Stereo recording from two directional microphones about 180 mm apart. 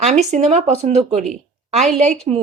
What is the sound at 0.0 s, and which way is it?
A woman's voice, 40° right (ahead or behind).